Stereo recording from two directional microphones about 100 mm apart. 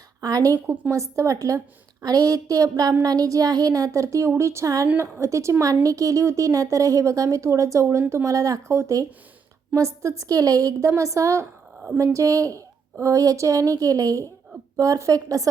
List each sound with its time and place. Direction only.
0.2 s a woman's voice: 35° right (ahead or behind)